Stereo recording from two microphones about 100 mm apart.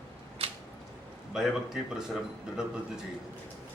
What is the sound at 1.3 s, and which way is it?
A man's voice, 5° right (ahead or behind).